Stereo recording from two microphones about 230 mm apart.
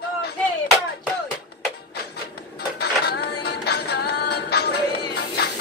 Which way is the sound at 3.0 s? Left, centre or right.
Left.